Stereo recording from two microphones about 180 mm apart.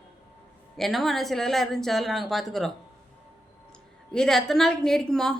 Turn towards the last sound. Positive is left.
turn(degrees=5)  # may be behind; listen again after turning